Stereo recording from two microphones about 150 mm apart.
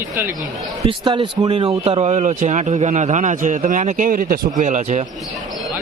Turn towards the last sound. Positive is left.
turn(degrees=-50)  # may be behind; listen again after turning